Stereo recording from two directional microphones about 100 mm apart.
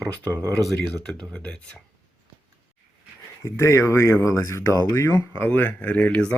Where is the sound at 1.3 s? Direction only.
10° left (ahead or behind).